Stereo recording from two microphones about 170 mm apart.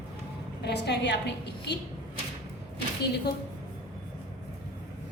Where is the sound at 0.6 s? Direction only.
80° left.